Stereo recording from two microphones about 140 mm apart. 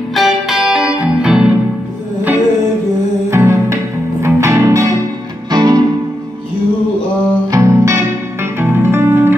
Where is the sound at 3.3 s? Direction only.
20° right (ahead or behind).